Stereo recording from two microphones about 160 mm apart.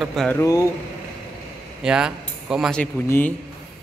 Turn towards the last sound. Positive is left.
turn(degrees=10)  # may be behind; listen again after turning